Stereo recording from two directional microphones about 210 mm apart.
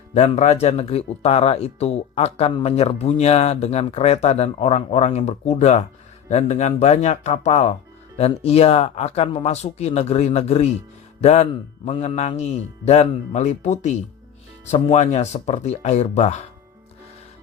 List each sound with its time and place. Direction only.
0.1 s speech: 30° left (ahead or behind)